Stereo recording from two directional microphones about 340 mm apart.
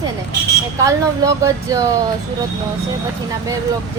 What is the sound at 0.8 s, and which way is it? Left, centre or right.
Speech, centre.